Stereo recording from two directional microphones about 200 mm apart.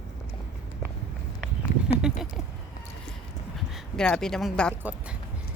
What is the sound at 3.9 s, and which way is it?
Speech, 5° left (ahead or behind).